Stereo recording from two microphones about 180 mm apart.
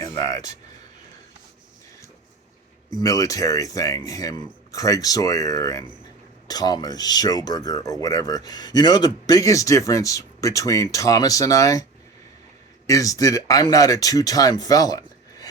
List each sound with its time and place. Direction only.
0.0 s speech: 20° left (ahead or behind)
3.0 s a man's voice: 20° left (ahead or behind)
12.9 s a man's voice: 20° left (ahead or behind)